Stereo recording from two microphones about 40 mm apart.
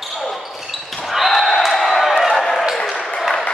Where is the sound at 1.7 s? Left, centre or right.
Centre.